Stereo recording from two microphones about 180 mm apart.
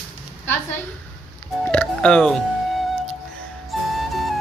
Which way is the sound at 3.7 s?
Centre (ahead or behind).